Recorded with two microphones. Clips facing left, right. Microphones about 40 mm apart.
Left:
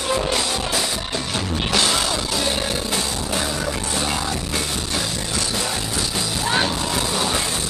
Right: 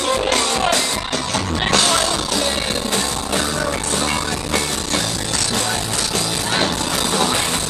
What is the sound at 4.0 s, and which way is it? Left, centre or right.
Music, right.